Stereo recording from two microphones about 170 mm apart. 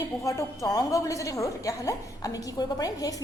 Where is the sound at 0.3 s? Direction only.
20° left (ahead or behind).